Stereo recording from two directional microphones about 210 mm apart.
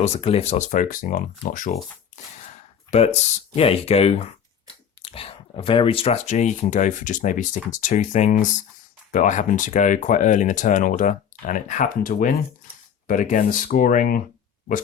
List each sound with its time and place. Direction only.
0.0 s speech: 30° left (ahead or behind)
2.9 s speech: 30° left (ahead or behind)